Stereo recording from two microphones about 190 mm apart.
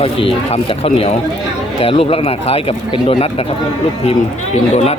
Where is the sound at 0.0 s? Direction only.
30° left (ahead or behind).